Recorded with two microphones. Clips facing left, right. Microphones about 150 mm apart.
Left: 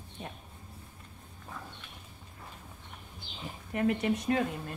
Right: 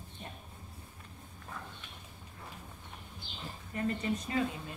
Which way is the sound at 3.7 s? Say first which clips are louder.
Left 5 dB; 70° left (ahead or behind).